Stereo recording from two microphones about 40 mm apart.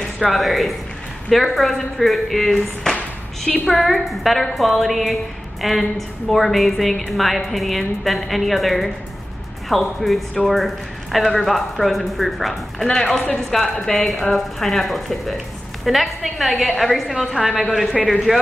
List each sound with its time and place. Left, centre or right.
0.3 s a woman's voice: centre
2.9 s music: centre
3.6 s a woman's voice: centre
18.3 s speech: centre